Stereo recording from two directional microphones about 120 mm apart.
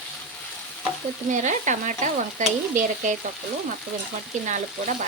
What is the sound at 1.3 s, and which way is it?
Stir, 90° right.